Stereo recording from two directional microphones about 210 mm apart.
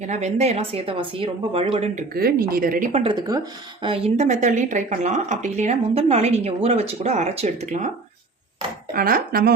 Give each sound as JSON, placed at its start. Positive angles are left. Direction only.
{"t": 0.0, "sound": "speech", "side_deg": -35}
{"t": 2.1, "sound": "a woman's voice", "side_deg": -45}
{"t": 3.0, "sound": "speech", "side_deg": -20}
{"t": 8.9, "sound": "a woman's voice", "side_deg": -45}